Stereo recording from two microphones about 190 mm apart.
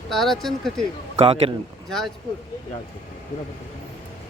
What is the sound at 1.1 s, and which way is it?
Speech, 30° right (ahead or behind).